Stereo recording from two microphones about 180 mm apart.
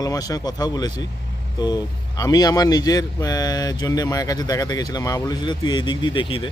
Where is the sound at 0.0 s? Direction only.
20° left (ahead or behind).